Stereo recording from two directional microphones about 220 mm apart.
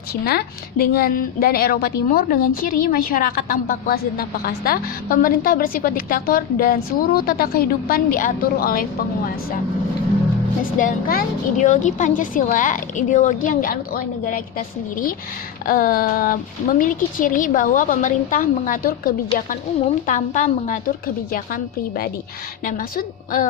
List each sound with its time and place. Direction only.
0.1 s a woman's voice: 45° left (ahead or behind)
10.6 s a woman's voice: 40° left (ahead or behind)
15.6 s a woman's voice: 40° left (ahead or behind)